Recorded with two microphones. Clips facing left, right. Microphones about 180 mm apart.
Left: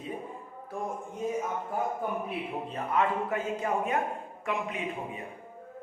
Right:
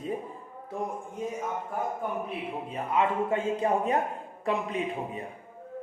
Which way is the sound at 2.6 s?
15° right (ahead or behind).